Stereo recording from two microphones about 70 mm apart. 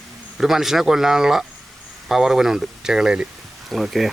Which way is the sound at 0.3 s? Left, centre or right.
Centre.